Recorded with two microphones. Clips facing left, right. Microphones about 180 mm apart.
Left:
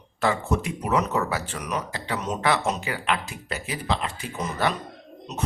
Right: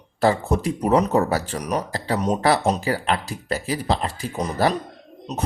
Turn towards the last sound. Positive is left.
turn(degrees=-35)  # may be behind; listen again after turning